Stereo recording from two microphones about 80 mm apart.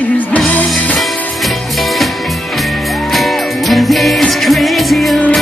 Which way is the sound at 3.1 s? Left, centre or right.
Centre.